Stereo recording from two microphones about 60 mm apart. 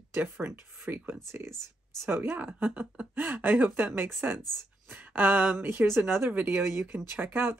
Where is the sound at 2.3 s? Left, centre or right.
Right.